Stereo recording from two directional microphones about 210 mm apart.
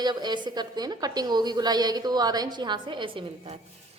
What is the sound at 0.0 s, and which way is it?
A woman's voice, 20° right (ahead or behind).